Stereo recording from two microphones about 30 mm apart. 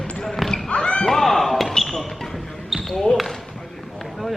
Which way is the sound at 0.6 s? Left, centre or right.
Left.